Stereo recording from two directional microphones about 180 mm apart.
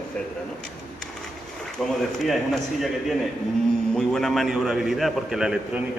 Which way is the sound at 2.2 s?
Centre (ahead or behind).